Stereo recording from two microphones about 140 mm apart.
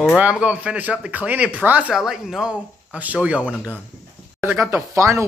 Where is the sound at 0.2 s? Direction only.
10° right (ahead or behind).